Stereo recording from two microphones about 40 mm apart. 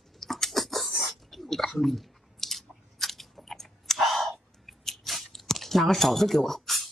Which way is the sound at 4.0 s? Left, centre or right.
Centre.